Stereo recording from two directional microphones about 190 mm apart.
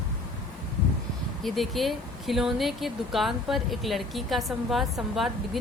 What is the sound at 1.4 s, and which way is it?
A woman's voice, centre (ahead or behind).